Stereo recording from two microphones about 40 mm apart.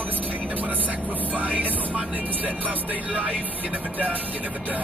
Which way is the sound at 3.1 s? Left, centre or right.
Right.